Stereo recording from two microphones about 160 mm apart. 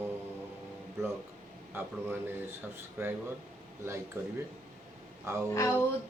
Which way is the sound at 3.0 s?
15° right (ahead or behind).